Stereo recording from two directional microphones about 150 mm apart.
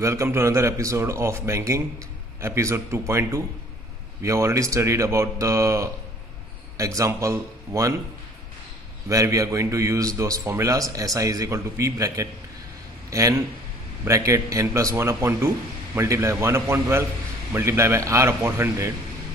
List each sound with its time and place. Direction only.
0.0 s a man's voice: 20° right (ahead or behind)
9.1 s a man's voice: 20° right (ahead or behind)